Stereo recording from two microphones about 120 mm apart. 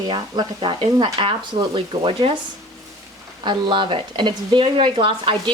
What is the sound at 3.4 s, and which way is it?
Speech, 40° right (ahead or behind).